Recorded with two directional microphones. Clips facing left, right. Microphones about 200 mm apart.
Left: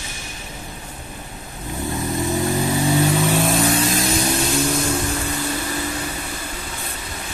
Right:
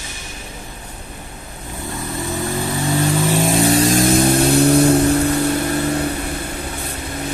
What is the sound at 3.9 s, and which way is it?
Music, 50° right (ahead or behind).